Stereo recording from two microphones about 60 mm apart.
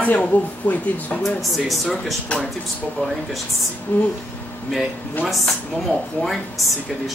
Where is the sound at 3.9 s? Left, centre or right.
Left.